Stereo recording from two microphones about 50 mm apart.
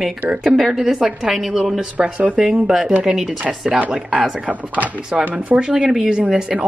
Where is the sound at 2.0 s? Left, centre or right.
Right.